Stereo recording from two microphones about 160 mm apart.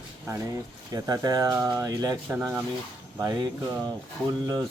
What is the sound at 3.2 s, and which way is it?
Speech, 25° right (ahead or behind).